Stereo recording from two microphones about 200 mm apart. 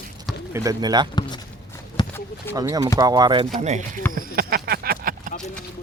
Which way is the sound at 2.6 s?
15° right (ahead or behind).